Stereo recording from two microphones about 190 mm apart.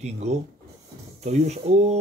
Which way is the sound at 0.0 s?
35° right (ahead or behind).